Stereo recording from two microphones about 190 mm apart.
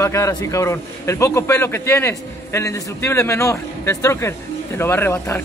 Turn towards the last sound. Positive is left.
turn(degrees=10)  # may be behind; listen again after turning